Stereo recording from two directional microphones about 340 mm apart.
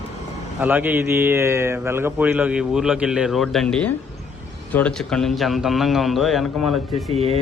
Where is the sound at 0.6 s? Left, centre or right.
Centre.